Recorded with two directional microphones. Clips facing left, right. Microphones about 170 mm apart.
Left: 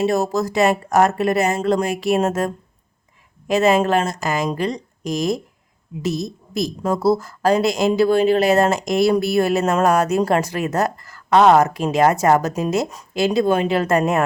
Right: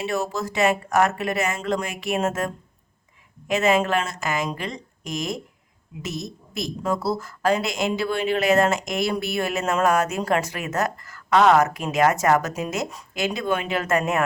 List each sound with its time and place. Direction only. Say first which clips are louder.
0.0 s a woman's voice: left 7 dB; 40° left (ahead or behind)